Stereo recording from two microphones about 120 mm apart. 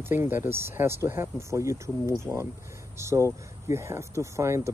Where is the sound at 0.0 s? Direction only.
20° right (ahead or behind).